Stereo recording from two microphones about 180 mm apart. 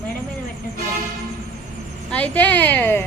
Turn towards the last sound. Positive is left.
turn(degrees=10)  # may be behind; listen again after turning